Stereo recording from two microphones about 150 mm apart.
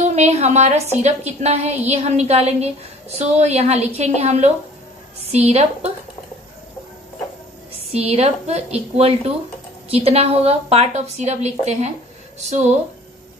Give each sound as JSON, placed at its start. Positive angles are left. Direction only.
{"t": 0.0, "sound": "a woman's voice", "side_deg": -45}
{"t": 5.5, "sound": "a woman's voice", "side_deg": -45}
{"t": 7.9, "sound": "a woman's voice", "side_deg": -45}